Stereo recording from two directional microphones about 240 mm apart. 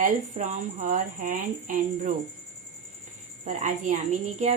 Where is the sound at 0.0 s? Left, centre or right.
Right.